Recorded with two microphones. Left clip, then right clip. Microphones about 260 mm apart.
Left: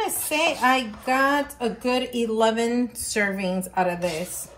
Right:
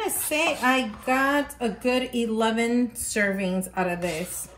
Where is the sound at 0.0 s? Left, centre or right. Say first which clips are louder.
Left 2 dB; centre.